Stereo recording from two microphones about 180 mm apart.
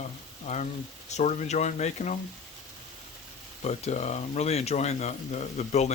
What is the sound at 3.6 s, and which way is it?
Speech, 40° left (ahead or behind).